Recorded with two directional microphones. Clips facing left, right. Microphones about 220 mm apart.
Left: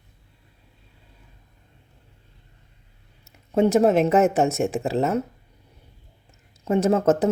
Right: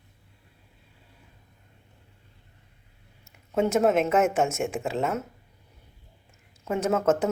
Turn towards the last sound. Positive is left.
turn(degrees=35)  # may be behind; listen again after turning